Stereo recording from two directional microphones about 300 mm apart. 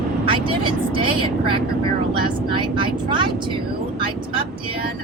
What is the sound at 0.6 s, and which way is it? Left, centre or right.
Speech, centre.